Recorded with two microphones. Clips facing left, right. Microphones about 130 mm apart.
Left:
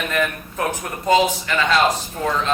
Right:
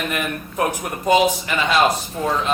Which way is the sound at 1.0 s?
15° right (ahead or behind).